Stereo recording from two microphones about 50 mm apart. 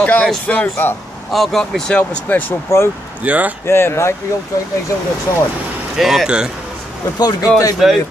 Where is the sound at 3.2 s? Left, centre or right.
Right.